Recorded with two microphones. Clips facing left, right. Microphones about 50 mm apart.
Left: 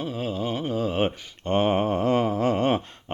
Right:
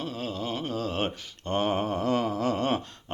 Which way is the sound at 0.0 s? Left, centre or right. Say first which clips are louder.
Left 4 dB; centre.